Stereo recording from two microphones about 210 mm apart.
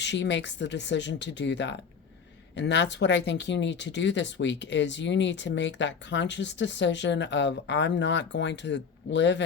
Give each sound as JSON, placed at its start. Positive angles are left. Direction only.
{"t": 0.0, "sound": "speech", "side_deg": 55}